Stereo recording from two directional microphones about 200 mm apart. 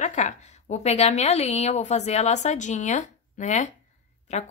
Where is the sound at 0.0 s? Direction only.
35° left (ahead or behind).